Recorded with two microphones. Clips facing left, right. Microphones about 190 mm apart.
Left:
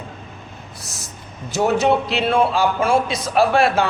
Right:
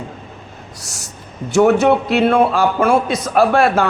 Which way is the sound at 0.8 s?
75° right (ahead or behind).